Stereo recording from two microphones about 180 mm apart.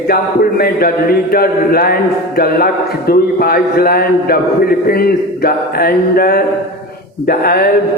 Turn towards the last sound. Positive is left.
turn(degrees=55)  # may be behind; listen again after turning